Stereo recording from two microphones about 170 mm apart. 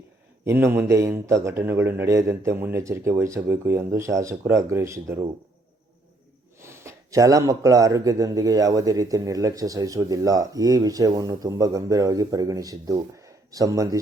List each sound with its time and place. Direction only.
0.4 s a man's voice: 15° right (ahead or behind)
6.6 s speech: 15° right (ahead or behind)